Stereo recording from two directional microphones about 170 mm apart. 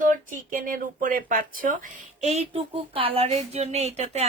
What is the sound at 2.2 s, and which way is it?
Speech, 40° right (ahead or behind).